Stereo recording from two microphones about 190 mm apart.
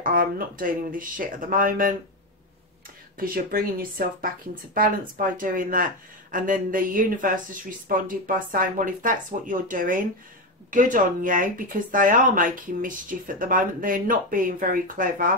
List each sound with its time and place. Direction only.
0.0 s speech: 45° right (ahead or behind)
3.2 s speech: 50° right (ahead or behind)